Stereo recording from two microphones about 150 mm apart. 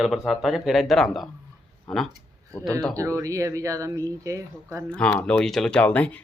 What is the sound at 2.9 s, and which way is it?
Speech, 20° right (ahead or behind).